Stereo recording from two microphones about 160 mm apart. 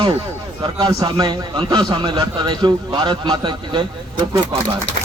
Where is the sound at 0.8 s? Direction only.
30° right (ahead or behind).